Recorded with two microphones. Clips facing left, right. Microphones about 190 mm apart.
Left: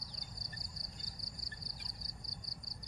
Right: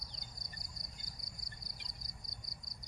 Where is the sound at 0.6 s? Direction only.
50° right (ahead or behind).